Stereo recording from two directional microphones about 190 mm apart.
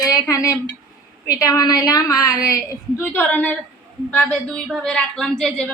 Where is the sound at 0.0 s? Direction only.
20° left (ahead or behind).